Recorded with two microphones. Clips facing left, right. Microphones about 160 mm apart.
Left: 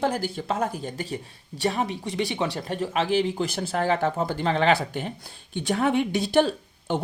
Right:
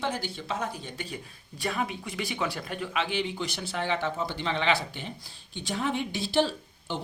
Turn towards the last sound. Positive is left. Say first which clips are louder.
# left 8 dB
turn(degrees=50)  # may be behind; listen again after turning